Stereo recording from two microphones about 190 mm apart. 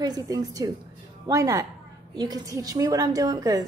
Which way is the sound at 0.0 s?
20° right (ahead or behind).